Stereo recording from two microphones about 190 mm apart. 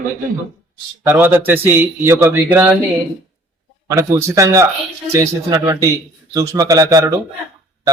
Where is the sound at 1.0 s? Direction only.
10° right (ahead or behind).